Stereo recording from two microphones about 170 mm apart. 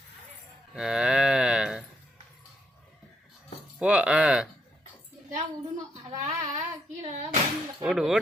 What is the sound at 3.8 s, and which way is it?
Speech, 5° right (ahead or behind).